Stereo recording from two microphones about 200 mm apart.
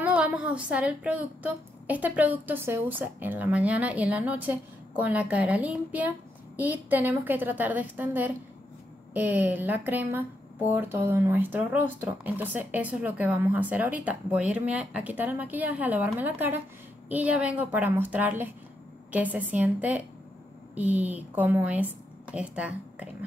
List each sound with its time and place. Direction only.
0.0 s speech: 5° right (ahead or behind)